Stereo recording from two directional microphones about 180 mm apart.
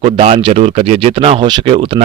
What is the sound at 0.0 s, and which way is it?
Speech, 35° right (ahead or behind).